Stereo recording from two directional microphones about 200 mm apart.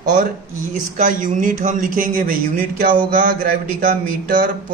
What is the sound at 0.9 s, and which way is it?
A man's voice, 40° right (ahead or behind).